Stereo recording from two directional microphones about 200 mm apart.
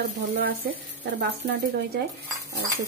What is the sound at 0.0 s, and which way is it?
Speech, 50° right (ahead or behind).